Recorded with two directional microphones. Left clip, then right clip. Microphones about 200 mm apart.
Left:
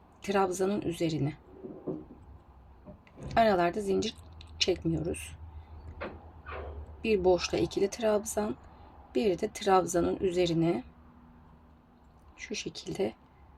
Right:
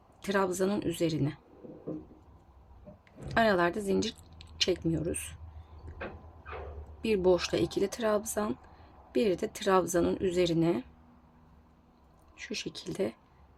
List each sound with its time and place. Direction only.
0.2 s speech: 20° right (ahead or behind)
3.2 s speech: 20° right (ahead or behind)
7.0 s speech: 20° right (ahead or behind)
12.4 s speech: 20° right (ahead or behind)